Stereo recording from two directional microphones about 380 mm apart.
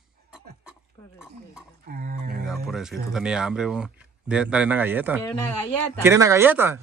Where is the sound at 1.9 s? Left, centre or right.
Right.